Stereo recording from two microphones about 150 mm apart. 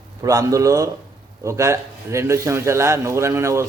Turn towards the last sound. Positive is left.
turn(degrees=-20)  # may be behind; listen again after turning